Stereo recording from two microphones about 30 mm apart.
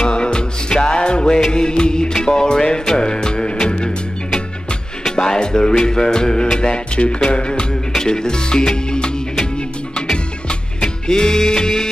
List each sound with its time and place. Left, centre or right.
0.0 s music: left
5.1 s music: left
8.0 s speech: left
10.1 s music: left